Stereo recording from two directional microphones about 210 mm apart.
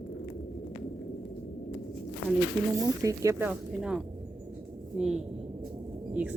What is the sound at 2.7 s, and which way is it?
Speech, 15° right (ahead or behind).